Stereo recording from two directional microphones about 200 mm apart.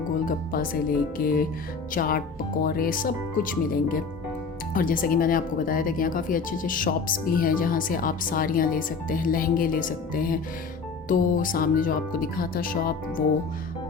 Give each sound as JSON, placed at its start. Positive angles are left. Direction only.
{"t": 0.3, "sound": "speech", "side_deg": 45}